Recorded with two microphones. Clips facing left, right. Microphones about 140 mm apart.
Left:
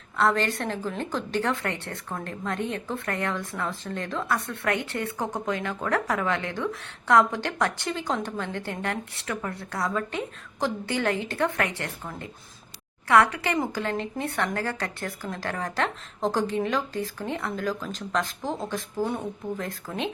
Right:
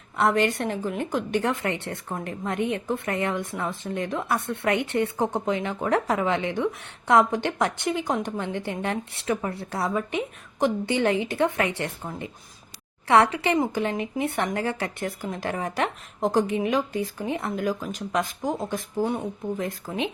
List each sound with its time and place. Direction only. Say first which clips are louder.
0.2 s speech: right 2 dB; 20° right (ahead or behind)